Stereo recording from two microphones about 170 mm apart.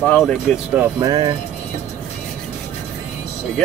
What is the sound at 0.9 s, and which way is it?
Speech, 25° right (ahead or behind).